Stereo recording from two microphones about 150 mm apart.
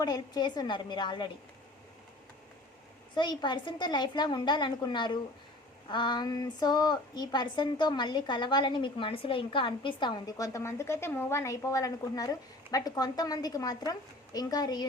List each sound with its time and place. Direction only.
0.0 s speech: 30° left (ahead or behind)
3.2 s a woman's voice: 30° left (ahead or behind)